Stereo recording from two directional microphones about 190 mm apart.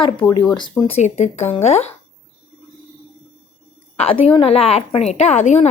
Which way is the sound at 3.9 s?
35° left (ahead or behind).